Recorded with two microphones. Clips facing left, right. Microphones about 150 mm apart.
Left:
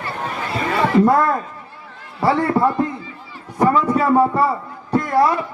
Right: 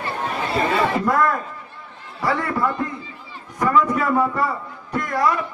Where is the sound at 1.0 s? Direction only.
30° left (ahead or behind).